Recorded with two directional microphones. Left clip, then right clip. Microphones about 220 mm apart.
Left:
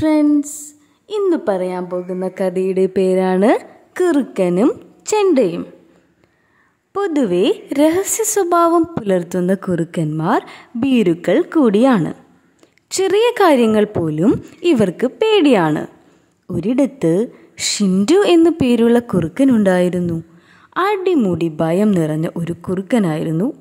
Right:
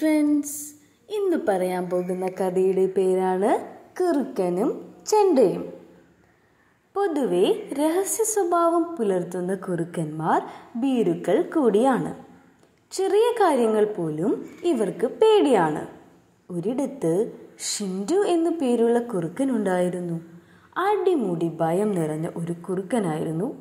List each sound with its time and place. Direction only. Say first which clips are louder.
0.0 s a woman's voice: left 7 dB; 20° left (ahead or behind)
2.5 s a woman's voice: left 3 dB; 35° left (ahead or behind)
4.0 s a woman's voice: left 7 dB; 60° left (ahead or behind)
6.9 s a woman's voice: left 6 dB; 35° left (ahead or behind)
13.0 s a woman's voice: left 6 dB; 45° left (ahead or behind)
16.8 s a woman's voice: left 7 dB; 50° left (ahead or behind)
17.8 s a woman's voice: left 9 dB; 40° left (ahead or behind)
19.1 s a woman's voice: left 10 dB; 40° left (ahead or behind)